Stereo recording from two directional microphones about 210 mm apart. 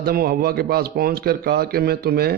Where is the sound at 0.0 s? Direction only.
45° right (ahead or behind).